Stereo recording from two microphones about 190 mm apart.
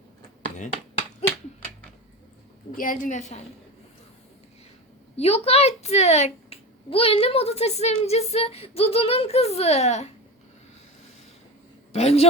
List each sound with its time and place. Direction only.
2.7 s speech: 45° left (ahead or behind)
5.1 s speech: 30° left (ahead or behind)
11.9 s speech: 35° left (ahead or behind)